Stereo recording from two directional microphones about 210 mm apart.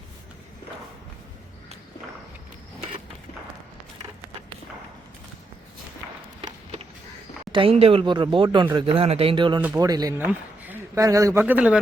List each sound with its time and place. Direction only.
6.4 s a sound: 30° right (ahead or behind)
7.5 s speech: 25° right (ahead or behind)
9.6 s speech: 5° right (ahead or behind)
9.8 s a man's voice: 15° right (ahead or behind)